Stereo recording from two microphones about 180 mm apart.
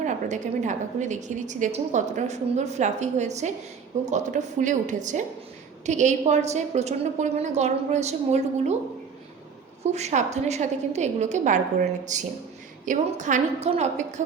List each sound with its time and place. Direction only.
0.0 s a woman's voice: 40° right (ahead or behind)
9.8 s a woman's voice: 40° right (ahead or behind)